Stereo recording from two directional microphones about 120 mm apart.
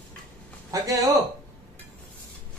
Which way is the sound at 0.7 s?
30° right (ahead or behind).